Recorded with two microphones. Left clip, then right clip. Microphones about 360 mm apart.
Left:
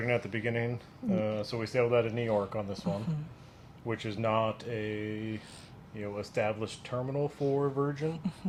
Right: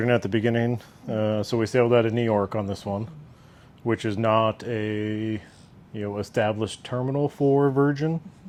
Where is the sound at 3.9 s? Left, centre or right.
Right.